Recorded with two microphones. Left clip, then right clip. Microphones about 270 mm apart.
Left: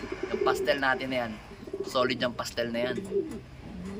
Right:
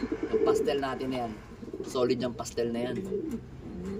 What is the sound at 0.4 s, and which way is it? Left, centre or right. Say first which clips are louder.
Speech: left 3 dB; centre.